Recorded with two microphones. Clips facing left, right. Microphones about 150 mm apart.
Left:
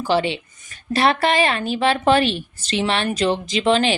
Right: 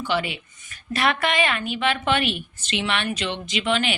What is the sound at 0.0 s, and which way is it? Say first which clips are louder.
A woman's voice: left 6 dB; 35° left (ahead or behind).